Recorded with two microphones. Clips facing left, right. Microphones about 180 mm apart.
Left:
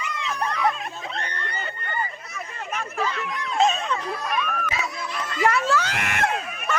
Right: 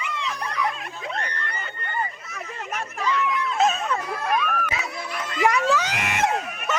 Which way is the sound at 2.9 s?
40° left (ahead or behind).